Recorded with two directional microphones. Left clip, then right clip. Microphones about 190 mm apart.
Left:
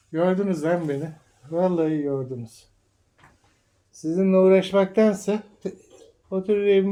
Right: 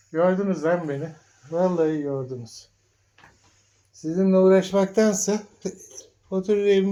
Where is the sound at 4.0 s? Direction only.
5° left (ahead or behind).